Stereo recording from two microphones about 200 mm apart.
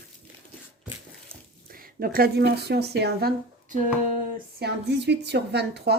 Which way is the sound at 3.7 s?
40° right (ahead or behind).